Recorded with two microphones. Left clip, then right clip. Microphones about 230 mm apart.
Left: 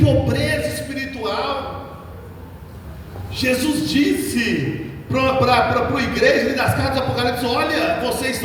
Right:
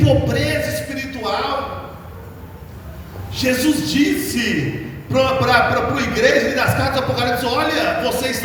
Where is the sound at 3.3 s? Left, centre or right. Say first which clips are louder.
Right 2 dB; left.